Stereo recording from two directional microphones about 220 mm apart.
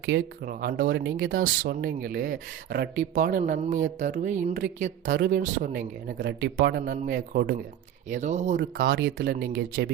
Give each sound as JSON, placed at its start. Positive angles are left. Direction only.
{"t": 0.0, "sound": "speech", "side_deg": -45}
{"t": 8.1, "sound": "speech", "side_deg": -30}
{"t": 8.8, "sound": "speech", "side_deg": -55}